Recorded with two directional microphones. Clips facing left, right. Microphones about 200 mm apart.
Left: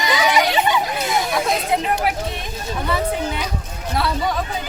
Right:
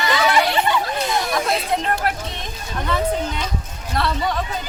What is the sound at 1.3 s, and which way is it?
Speech, 5° left (ahead or behind).